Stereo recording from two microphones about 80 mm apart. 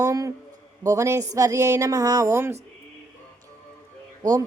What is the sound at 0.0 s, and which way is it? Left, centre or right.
Speech, right.